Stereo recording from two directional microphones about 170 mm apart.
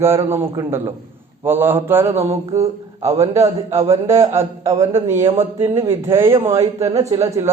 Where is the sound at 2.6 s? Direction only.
40° right (ahead or behind).